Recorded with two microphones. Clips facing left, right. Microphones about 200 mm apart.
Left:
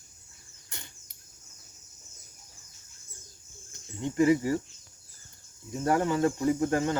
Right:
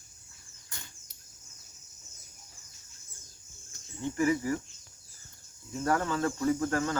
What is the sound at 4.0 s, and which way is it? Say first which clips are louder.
Speech: left 5 dB; 20° left (ahead or behind).